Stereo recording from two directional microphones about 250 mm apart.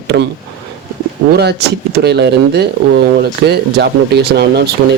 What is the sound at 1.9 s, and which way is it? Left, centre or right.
Speech, right.